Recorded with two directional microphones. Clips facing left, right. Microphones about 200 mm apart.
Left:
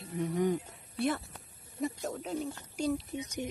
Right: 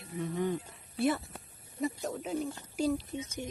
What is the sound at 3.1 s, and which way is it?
Speech, 15° left (ahead or behind).